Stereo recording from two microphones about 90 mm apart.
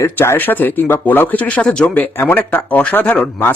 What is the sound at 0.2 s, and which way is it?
Speech, 20° left (ahead or behind).